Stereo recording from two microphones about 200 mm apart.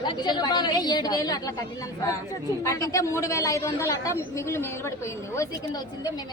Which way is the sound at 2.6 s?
15° left (ahead or behind).